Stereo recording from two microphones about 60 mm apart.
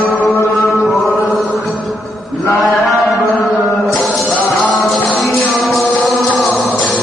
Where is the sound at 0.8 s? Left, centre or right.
Centre.